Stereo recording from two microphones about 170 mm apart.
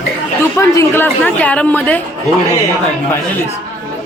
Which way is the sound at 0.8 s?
10° left (ahead or behind).